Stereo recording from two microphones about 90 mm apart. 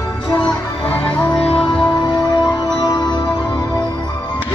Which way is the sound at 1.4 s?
90° left.